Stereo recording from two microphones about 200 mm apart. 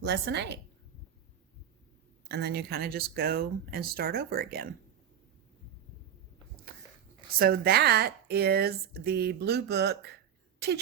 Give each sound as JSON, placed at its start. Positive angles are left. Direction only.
{"t": 0.0, "sound": "a woman's voice", "side_deg": -60}
{"t": 2.2, "sound": "speech", "side_deg": -55}
{"t": 7.3, "sound": "speech", "side_deg": -50}